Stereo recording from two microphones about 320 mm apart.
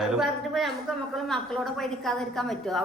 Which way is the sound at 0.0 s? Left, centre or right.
Centre.